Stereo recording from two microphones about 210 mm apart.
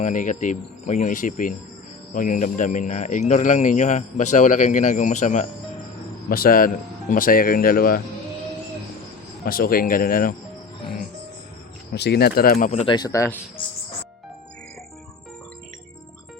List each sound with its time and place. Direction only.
0.0 s a man's voice: 35° left (ahead or behind)
6.2 s speech: 45° left (ahead or behind)
9.4 s speech: 45° left (ahead or behind)
11.9 s speech: 50° left (ahead or behind)
12.8 s speech: 20° left (ahead or behind)